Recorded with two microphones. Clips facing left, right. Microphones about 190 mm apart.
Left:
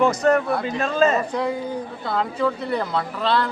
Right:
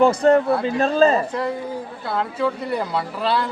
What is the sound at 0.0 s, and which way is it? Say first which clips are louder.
A man's voice: right 3 dB; 30° right (ahead or behind).